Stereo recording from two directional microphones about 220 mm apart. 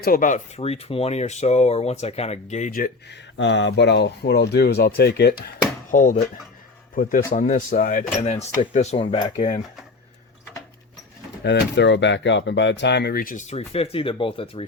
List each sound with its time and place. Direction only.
0.0 s speech: 40° left (ahead or behind)
3.3 s speech: 55° left (ahead or behind)
5.9 s speech: 35° left (ahead or behind)
11.4 s speech: 50° left (ahead or behind); by 14.6 s 25° left (ahead or behind)